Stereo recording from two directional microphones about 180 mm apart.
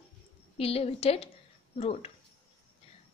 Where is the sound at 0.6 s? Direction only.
35° left (ahead or behind).